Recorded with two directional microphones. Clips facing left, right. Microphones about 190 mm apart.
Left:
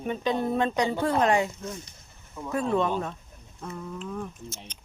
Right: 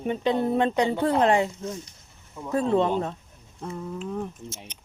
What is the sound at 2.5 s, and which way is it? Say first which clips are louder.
Speech: right 3 dB; 30° right (ahead or behind).